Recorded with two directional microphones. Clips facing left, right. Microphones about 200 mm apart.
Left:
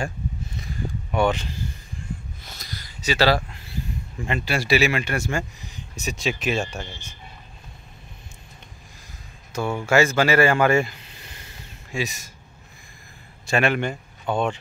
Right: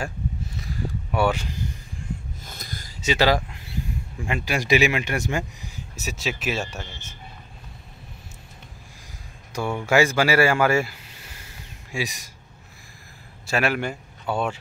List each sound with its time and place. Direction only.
0.6 s a sound: 5° right (ahead or behind)
2.6 s a sound: 50° right (ahead or behind)
3.0 s speech: 20° right (ahead or behind)
5.8 s speech: 5° right (ahead or behind)
9.5 s speech: 15° right (ahead or behind)
13.5 s a man's voice: 5° right (ahead or behind)